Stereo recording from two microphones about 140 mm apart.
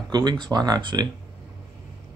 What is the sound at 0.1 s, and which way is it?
Speech, 30° right (ahead or behind).